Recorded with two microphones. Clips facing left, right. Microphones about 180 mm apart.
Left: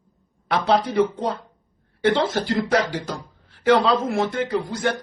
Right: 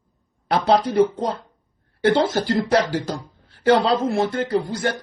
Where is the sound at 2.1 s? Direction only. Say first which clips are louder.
Right 2 dB; 40° right (ahead or behind).